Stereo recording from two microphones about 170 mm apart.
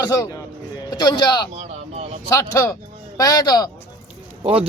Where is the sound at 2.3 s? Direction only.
20° left (ahead or behind).